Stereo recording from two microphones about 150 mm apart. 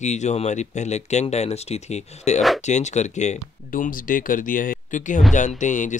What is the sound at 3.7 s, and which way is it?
Speech, 65° left (ahead or behind).